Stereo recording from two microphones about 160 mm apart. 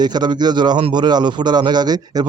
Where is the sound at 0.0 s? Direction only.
25° right (ahead or behind).